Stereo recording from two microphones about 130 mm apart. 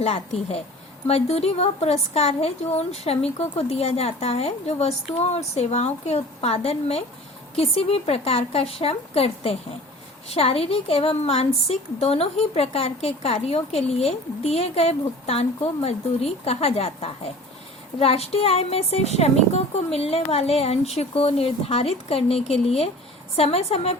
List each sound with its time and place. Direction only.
0.0 s a woman's voice: 50° left (ahead or behind)